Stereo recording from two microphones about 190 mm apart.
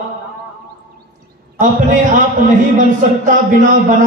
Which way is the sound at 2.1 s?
40° right (ahead or behind).